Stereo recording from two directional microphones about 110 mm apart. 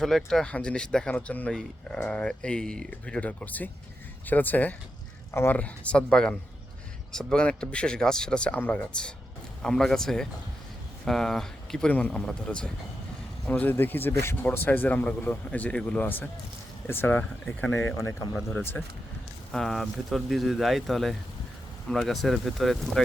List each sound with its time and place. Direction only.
0.0 s speech: 5° left (ahead or behind); by 5.5 s 25° left (ahead or behind)
5.5 s speech: 10° left (ahead or behind)
19.5 s speech: 5° left (ahead or behind)